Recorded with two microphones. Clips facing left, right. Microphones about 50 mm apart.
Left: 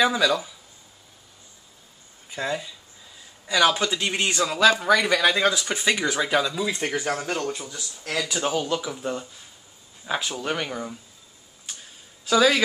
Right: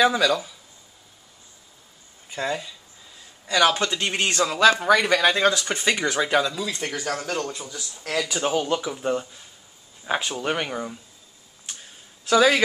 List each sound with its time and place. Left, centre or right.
0.0 s a man's voice: centre
2.3 s a man's voice: centre
5.1 s a man's voice: centre
6.5 s speech: centre
8.0 s speech: centre
12.3 s speech: centre